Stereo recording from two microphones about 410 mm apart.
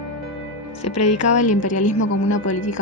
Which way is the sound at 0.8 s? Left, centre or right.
Left.